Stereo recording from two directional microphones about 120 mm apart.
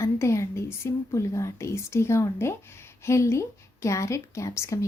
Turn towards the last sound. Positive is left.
turn(degrees=25)  # may be behind; listen again after turning